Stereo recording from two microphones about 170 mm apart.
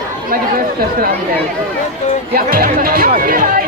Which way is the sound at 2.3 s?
60° right (ahead or behind).